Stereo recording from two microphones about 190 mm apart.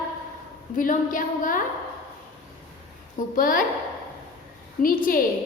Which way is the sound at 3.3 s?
45° left (ahead or behind).